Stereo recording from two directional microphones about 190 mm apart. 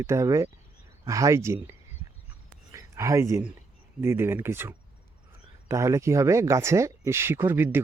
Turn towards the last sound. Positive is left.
turn(degrees=-10)  # may be behind; listen again after turning